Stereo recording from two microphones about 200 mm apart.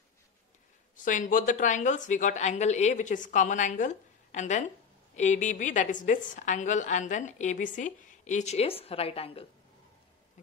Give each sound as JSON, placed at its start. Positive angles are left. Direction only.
{"t": 0.9, "sound": "a woman's voice", "side_deg": 40}